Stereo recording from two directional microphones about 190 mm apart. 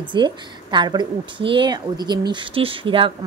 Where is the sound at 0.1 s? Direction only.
25° right (ahead or behind).